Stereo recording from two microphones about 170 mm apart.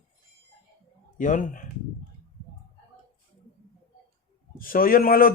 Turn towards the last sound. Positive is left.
turn(degrees=55)  # may be behind; listen again after turning